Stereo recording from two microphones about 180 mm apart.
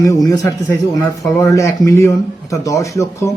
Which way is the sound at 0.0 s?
20° left (ahead or behind).